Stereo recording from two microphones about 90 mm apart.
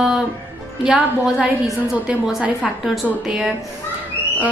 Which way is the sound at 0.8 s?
15° right (ahead or behind).